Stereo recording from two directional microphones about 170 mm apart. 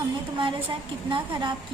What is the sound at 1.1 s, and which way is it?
Speech, 25° right (ahead or behind).